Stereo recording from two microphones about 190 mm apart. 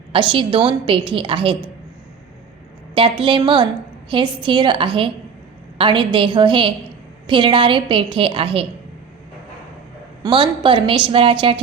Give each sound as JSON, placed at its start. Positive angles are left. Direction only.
{"t": 0.1, "sound": "a woman's voice", "side_deg": -25}
{"t": 2.9, "sound": "a woman's voice", "side_deg": -25}
{"t": 10.2, "sound": "a woman's voice", "side_deg": -25}